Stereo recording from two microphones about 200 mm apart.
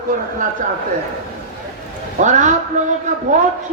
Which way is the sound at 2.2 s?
35° right (ahead or behind).